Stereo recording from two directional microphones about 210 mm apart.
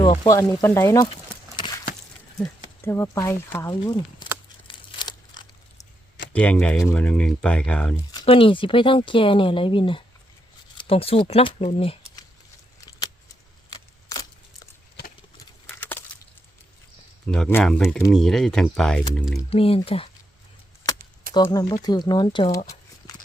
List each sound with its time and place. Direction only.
0.3 s speech: 15° left (ahead or behind)
1.5 s a sound: 20° left (ahead or behind)
2.4 s speech: 10° left (ahead or behind)
4.7 s a sound: 20° left (ahead or behind)
6.3 s speech: 5° left (ahead or behind)
8.1 s speech: 25° left (ahead or behind)
13.7 s keys jangling: 15° left (ahead or behind)
15.4 s patter: 10° left (ahead or behind)
17.2 s speech: 5° left (ahead or behind)
19.5 s speech: 25° left (ahead or behind)
20.9 s chop: 15° left (ahead or behind)
21.3 s speech: 15° left (ahead or behind)